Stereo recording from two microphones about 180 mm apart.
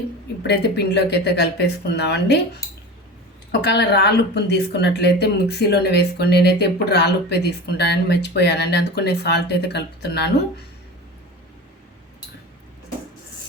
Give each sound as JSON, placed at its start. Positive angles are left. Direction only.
{"t": 0.4, "sound": "speech", "side_deg": 65}
{"t": 3.5, "sound": "speech", "side_deg": 70}